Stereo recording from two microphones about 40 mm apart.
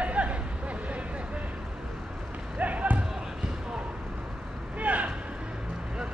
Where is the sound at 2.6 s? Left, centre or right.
Right.